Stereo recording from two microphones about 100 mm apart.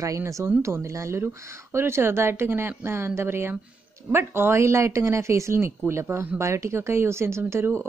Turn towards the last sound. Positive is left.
turn(degrees=-25)  # may be behind; listen again after turning